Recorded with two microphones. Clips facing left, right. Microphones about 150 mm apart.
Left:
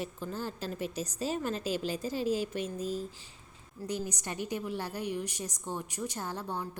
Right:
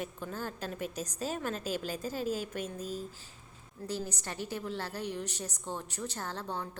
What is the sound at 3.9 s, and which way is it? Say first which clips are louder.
A woman's voice: left 2 dB; 15° left (ahead or behind).